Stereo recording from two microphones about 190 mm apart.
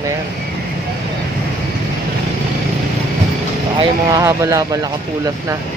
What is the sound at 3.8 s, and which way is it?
Speech, 20° right (ahead or behind).